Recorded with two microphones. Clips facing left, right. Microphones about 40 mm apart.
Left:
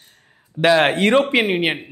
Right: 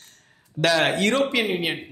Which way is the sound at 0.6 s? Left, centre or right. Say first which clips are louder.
Left 5 dB; left.